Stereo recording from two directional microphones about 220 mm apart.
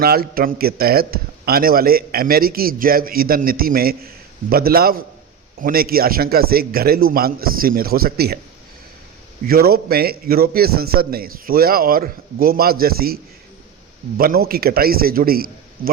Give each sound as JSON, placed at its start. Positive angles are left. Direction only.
{"t": 0.0, "sound": "a man's voice", "side_deg": -45}
{"t": 9.5, "sound": "a man's voice", "side_deg": -45}
{"t": 14.2, "sound": "a man's voice", "side_deg": -40}